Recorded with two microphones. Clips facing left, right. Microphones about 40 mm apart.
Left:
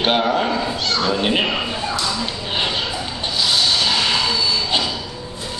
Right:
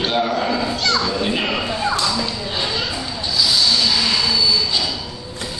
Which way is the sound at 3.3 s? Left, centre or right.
Left.